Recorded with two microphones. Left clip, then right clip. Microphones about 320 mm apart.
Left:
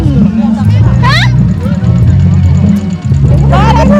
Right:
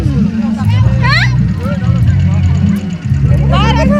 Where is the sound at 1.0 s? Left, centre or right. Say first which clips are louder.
Left 2 dB; left.